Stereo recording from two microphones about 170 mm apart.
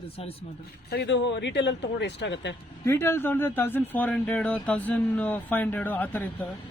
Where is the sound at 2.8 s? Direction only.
15° left (ahead or behind).